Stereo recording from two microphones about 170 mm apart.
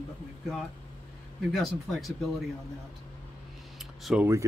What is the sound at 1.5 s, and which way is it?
Speech, centre (ahead or behind).